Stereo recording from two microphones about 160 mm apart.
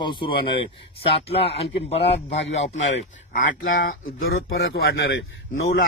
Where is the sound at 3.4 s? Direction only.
65° left (ahead or behind); by 5.2 s 90° left.